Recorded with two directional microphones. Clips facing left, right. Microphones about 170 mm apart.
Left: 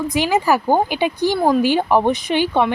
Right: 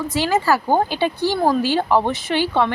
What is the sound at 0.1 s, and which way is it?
Speech, 15° left (ahead or behind).